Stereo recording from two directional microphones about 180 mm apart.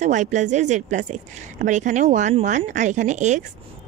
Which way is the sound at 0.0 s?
40° right (ahead or behind).